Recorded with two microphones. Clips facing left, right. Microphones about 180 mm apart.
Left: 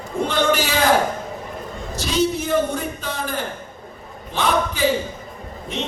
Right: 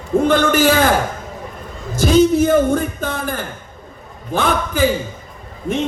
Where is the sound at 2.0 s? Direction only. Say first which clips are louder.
Right 9 dB; 50° right (ahead or behind).